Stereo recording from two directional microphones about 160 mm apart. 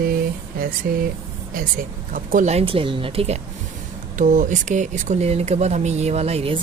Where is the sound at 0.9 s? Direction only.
70° right (ahead or behind).